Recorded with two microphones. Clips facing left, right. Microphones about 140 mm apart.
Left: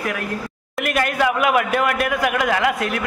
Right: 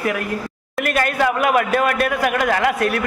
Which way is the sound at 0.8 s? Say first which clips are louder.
Right 1 dB; 15° left (ahead or behind).